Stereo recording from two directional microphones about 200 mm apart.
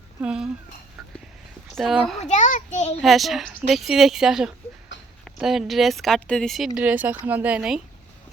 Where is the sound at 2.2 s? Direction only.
40° left (ahead or behind).